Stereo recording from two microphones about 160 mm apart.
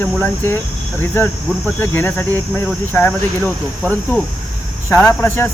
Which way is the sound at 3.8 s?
10° left (ahead or behind).